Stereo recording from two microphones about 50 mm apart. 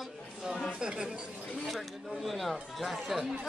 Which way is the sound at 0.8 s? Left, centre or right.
Centre.